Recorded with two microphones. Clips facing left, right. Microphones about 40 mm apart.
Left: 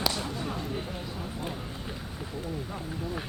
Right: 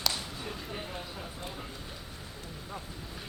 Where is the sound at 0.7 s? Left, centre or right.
Centre.